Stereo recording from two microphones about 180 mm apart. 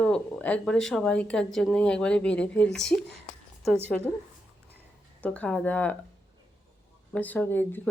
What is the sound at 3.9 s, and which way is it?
Speech, 5° left (ahead or behind).